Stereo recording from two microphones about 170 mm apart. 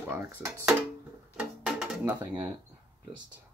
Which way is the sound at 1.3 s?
5° right (ahead or behind).